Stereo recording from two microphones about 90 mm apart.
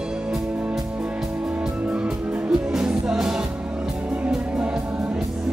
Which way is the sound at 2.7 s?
10° right (ahead or behind).